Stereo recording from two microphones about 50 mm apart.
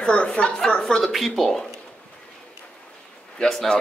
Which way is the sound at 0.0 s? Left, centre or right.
Centre.